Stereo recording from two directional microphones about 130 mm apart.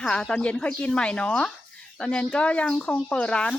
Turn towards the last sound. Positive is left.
turn(degrees=5)  # may be behind; listen again after turning